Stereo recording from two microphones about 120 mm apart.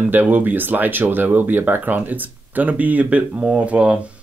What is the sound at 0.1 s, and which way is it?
Speech, 15° right (ahead or behind).